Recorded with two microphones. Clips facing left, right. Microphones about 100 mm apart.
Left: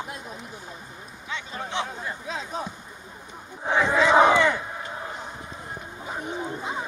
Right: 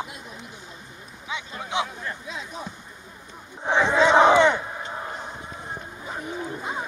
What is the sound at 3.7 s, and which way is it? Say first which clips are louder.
Crowd: right 1 dB; 25° right (ahead or behind).